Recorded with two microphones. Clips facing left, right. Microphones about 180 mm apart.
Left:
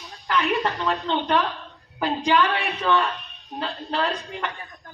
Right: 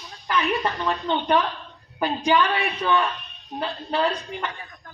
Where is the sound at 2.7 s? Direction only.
Centre (ahead or behind).